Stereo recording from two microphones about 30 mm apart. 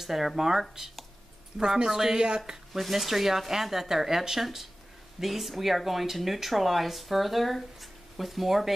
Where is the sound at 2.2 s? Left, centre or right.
Right.